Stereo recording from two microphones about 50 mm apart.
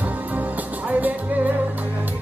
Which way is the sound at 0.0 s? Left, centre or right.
Right.